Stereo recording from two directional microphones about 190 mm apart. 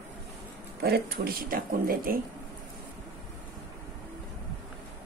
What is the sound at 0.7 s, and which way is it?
Speech, 55° right (ahead or behind).